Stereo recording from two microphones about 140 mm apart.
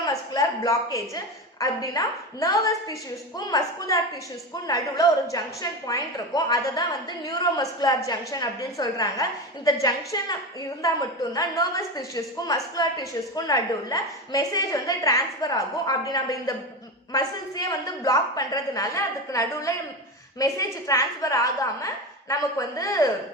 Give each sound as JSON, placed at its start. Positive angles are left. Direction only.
{"t": 0.0, "sound": "a woman's voice", "side_deg": 25}